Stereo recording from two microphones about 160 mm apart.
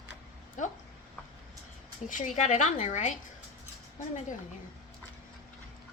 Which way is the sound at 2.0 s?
50° left (ahead or behind).